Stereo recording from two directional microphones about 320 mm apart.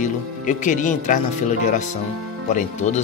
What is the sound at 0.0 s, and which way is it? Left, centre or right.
Speech, left.